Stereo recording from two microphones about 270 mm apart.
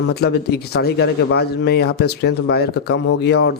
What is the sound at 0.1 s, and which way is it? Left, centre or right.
Speech, left.